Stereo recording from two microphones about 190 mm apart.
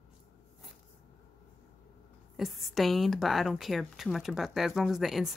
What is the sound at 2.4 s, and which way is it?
A woman's voice, centre (ahead or behind).